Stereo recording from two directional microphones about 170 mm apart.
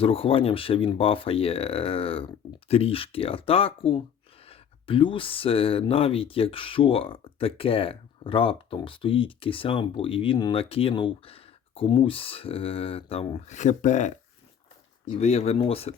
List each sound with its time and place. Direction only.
0.0 s speech: 35° left (ahead or behind)
15.2 s speech: 40° left (ahead or behind)